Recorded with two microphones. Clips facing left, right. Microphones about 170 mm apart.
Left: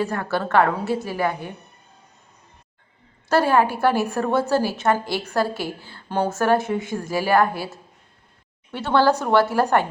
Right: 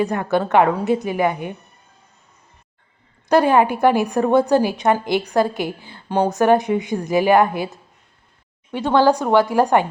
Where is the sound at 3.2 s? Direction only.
15° right (ahead or behind).